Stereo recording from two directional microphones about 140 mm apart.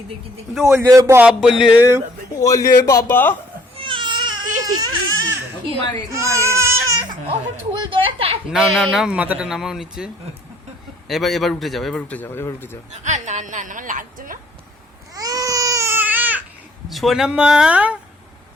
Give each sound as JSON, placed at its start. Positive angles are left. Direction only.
{"t": 0.6, "sound": "a man's voice", "side_deg": -20}
{"t": 1.3, "sound": "a man's voice", "side_deg": -5}
{"t": 1.8, "sound": "speech", "side_deg": -15}
{"t": 2.4, "sound": "a man's voice", "side_deg": 25}
{"t": 3.8, "sound": "baby cry", "side_deg": -35}
{"t": 4.6, "sound": "a sound", "side_deg": -30}
{"t": 6.1, "sound": "baby cry", "side_deg": -20}
{"t": 7.9, "sound": "speech", "side_deg": -40}
{"t": 8.4, "sound": "a man's voice", "side_deg": 0}
{"t": 9.0, "sound": "a man's voice", "side_deg": -10}
{"t": 11.1, "sound": "a man's voice", "side_deg": 0}
{"t": 12.9, "sound": "a woman's voice", "side_deg": -55}
{"t": 15.1, "sound": "baby cry", "side_deg": -25}
{"t": 16.9, "sound": "a man's voice", "side_deg": 0}